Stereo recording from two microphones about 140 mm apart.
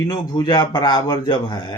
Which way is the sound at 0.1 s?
30° left (ahead or behind).